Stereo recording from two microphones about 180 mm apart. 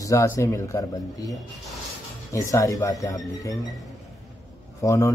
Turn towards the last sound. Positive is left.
turn(degrees=20)  # may be behind; listen again after turning